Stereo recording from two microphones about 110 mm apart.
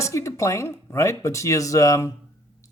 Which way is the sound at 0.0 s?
25° left (ahead or behind).